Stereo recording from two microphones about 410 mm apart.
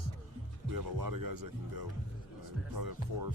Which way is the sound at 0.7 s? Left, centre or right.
Right.